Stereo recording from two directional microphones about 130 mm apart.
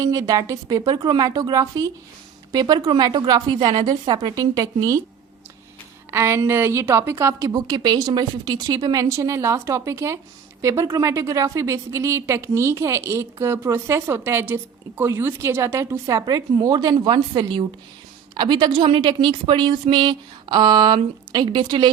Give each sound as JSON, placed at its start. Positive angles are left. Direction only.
{"t": 0.0, "sound": "a woman's voice", "side_deg": -25}
{"t": 6.1, "sound": "a woman's voice", "side_deg": -20}